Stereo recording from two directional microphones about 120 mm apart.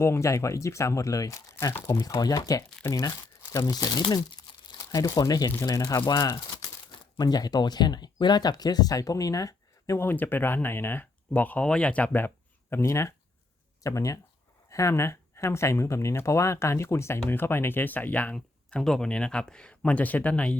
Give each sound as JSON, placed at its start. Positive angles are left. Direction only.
{"t": 0.0, "sound": "speech", "side_deg": 25}
{"t": 12.7, "sound": "speech", "side_deg": 25}